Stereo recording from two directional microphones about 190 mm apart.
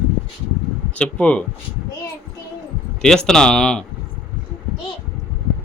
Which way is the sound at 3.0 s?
5° left (ahead or behind).